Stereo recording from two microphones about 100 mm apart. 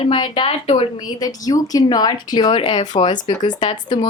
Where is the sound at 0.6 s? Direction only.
70° left (ahead or behind).